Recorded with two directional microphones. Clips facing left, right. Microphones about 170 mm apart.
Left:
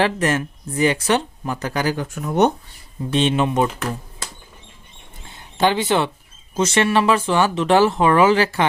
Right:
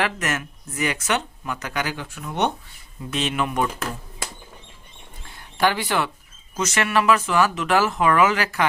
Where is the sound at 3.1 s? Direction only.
30° left (ahead or behind).